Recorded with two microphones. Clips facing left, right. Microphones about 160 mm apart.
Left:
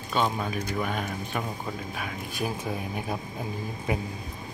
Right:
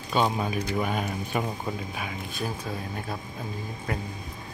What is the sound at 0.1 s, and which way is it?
Speech, 5° right (ahead or behind).